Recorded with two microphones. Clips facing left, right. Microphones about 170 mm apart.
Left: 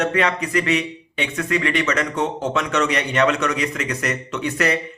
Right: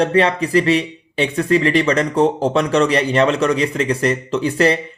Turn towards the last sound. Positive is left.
turn(degrees=-30)  # may be behind; listen again after turning